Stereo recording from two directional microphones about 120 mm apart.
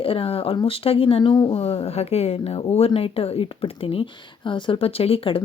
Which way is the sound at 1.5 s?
55° left (ahead or behind).